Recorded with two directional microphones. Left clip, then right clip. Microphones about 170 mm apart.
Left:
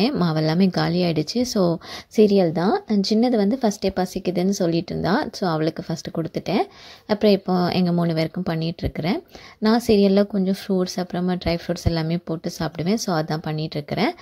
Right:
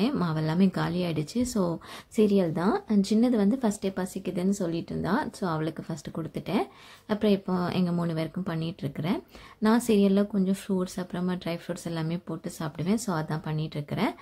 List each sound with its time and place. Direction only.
0.2 s speech: 30° left (ahead or behind)